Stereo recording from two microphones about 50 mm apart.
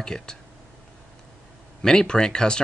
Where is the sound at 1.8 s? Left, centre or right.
Centre.